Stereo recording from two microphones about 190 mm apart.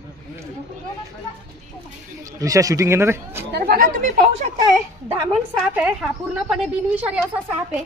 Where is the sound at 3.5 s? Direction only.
55° right (ahead or behind); by 4.5 s 40° right (ahead or behind).